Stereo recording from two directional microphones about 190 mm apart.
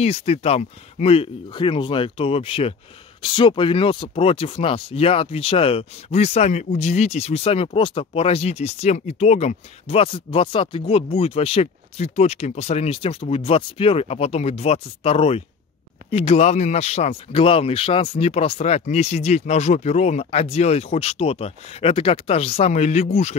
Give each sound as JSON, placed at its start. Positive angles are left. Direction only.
{"t": 0.0, "sound": "speech", "side_deg": 30}